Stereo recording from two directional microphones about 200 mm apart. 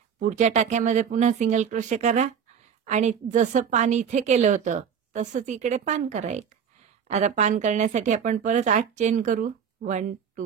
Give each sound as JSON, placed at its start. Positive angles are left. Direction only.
{"t": 0.3, "sound": "a woman's voice", "side_deg": -35}